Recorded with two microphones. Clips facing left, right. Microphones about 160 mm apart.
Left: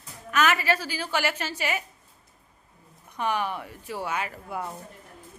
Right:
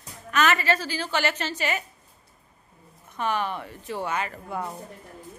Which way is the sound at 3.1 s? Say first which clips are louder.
Right 1 dB; 15° left (ahead or behind).